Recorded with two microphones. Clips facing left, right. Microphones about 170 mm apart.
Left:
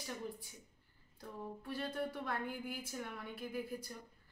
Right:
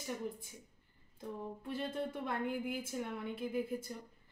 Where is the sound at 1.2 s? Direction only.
20° right (ahead or behind).